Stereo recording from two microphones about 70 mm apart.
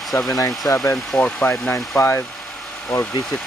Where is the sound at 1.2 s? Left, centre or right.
Left.